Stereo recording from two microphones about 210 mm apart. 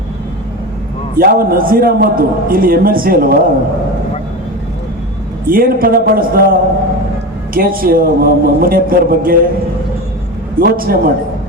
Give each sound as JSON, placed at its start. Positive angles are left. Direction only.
{"t": 1.1, "sound": "a man's voice", "side_deg": -45}
{"t": 5.5, "sound": "a man's voice", "side_deg": -45}
{"t": 7.5, "sound": "a man's voice", "side_deg": -45}
{"t": 10.6, "sound": "a man's voice", "side_deg": -45}